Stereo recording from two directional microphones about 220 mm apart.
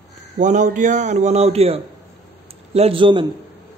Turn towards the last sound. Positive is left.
turn(degrees=-20)  # may be behind; listen again after turning